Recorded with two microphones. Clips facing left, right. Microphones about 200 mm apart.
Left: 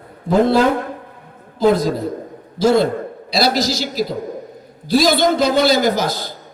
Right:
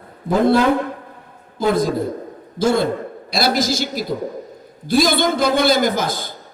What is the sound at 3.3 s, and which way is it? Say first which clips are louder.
A man's voice: left 1 dB; 50° right (ahead or behind).